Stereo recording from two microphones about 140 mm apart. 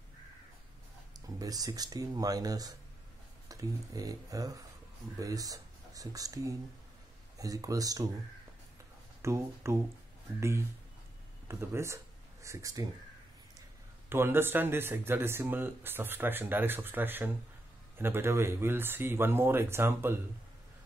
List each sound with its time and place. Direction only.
1.1 s speech: 25° right (ahead or behind)
9.2 s speech: 20° right (ahead or behind)
11.4 s speech: 20° right (ahead or behind)